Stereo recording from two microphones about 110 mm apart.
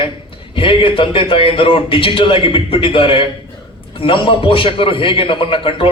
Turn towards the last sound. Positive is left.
turn(degrees=55)  # may be behind; listen again after turning